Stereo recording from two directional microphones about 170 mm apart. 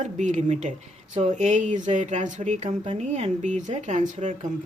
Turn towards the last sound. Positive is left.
turn(degrees=-45)  # may be behind; listen again after turning